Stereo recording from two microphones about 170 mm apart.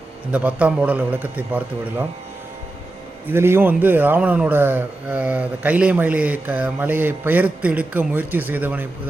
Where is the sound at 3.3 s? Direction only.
15° right (ahead or behind).